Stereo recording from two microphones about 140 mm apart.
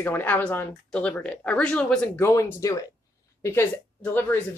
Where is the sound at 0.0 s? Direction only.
15° left (ahead or behind).